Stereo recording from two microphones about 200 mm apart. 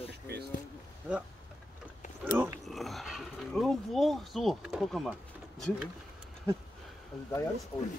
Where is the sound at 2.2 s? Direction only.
10° right (ahead or behind).